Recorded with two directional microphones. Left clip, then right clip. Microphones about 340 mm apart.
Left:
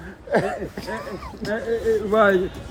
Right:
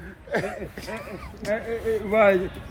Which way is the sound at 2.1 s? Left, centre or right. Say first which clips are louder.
Left 1 dB; centre.